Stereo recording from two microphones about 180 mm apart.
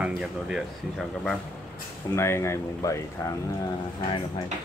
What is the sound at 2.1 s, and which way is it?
Speech, 15° left (ahead or behind).